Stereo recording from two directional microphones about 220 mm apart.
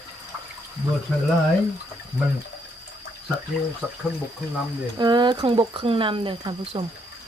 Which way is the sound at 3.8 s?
5° right (ahead or behind).